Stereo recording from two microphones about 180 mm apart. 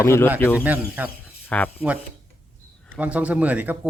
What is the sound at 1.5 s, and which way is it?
Speech, 10° left (ahead or behind).